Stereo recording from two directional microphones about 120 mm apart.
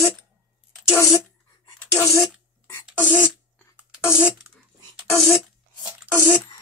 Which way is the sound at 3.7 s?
10° right (ahead or behind).